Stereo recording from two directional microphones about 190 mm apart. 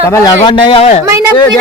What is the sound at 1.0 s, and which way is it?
Speech, 15° right (ahead or behind).